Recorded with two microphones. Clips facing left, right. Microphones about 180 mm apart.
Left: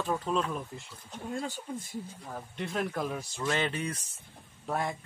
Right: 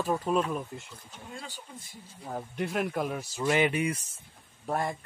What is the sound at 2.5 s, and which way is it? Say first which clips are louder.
Speech: right 2 dB; 5° right (ahead or behind).